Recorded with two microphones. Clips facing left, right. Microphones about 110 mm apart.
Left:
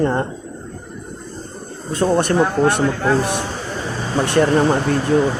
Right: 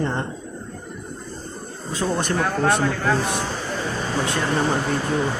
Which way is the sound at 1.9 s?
60° left (ahead or behind).